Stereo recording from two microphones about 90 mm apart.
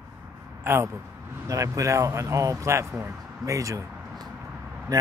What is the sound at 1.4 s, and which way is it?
Speech, 40° right (ahead or behind).